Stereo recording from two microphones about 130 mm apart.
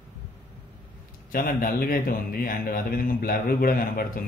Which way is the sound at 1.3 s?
90° left.